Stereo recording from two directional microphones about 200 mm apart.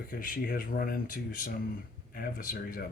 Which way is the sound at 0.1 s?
45° left (ahead or behind).